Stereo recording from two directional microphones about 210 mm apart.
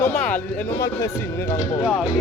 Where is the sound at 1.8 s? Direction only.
Centre (ahead or behind).